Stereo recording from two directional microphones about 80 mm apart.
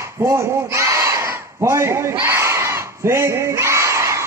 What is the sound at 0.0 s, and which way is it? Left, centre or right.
Battle cry, right.